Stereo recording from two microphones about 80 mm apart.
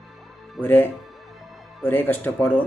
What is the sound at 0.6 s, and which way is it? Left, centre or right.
Speech, left.